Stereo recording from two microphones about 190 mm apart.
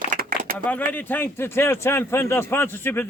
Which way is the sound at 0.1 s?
50° right (ahead or behind).